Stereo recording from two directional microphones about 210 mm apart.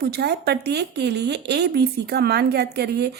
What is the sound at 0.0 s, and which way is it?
A woman's voice, 50° right (ahead or behind).